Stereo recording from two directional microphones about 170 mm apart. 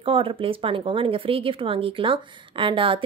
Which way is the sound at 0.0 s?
30° right (ahead or behind).